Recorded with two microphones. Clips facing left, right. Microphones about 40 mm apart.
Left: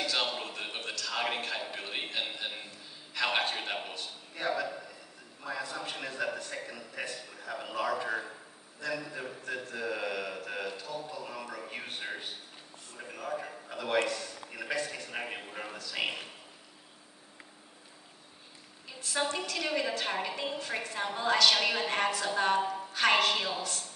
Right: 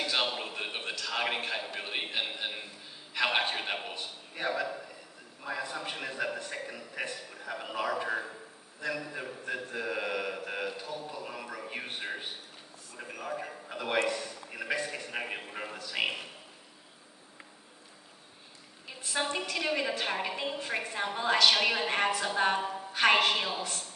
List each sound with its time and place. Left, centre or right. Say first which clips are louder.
0.0 s a sound: right 1 dB; centre
5.4 s a woman's voice: right 1 dB; centre
18.9 s a woman's voice: even; right